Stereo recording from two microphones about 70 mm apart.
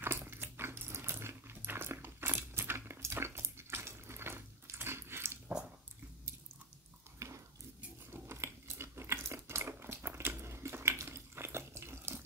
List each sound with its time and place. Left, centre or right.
0.0 s biting: right
7.2 s biting: right
8.1 s a sound: right